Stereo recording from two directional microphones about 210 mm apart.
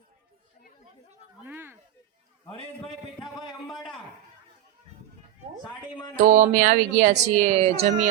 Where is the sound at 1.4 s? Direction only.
10° right (ahead or behind).